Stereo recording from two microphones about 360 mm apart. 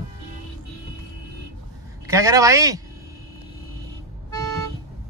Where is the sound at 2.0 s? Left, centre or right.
Centre.